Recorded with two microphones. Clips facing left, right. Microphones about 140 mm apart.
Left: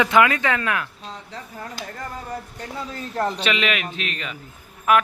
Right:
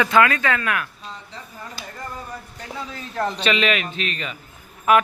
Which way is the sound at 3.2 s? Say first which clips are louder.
Right 3 dB; 5° left (ahead or behind).